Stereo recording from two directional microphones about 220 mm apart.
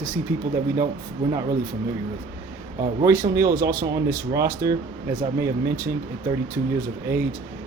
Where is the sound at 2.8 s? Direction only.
15° right (ahead or behind).